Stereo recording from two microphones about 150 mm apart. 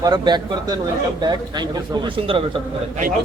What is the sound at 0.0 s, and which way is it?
A man's voice, 30° right (ahead or behind).